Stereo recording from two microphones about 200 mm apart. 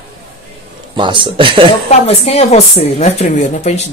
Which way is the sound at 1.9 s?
30° left (ahead or behind).